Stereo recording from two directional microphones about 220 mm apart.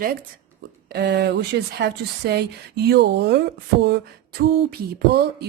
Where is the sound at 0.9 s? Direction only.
50° right (ahead or behind).